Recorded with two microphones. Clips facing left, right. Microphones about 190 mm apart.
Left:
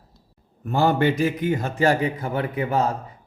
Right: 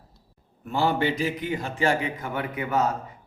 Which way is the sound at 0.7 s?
50° left (ahead or behind).